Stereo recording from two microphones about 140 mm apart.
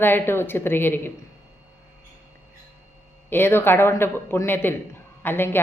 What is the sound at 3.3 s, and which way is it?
A woman's voice, 15° left (ahead or behind).